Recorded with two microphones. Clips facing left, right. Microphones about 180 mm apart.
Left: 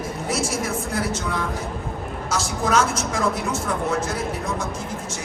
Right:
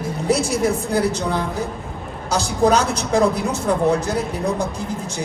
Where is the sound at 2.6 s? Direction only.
35° right (ahead or behind).